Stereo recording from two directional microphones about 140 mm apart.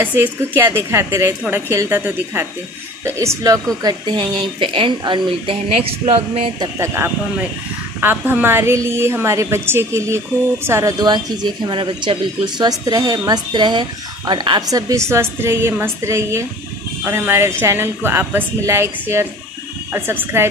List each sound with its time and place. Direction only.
0.0 s a woman's voice: 15° right (ahead or behind); by 6.7 s 40° right (ahead or behind)
6.8 s a woman's voice: 15° right (ahead or behind)